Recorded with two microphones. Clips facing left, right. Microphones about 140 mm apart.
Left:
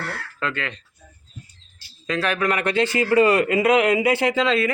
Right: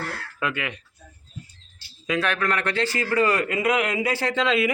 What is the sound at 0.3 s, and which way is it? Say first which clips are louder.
Speech: even; 10° right (ahead or behind).